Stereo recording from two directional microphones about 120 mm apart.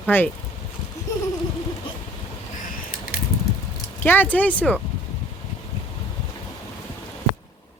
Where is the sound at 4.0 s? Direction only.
15° left (ahead or behind).